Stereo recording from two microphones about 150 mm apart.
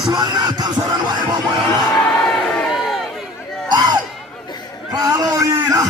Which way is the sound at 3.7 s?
30° right (ahead or behind).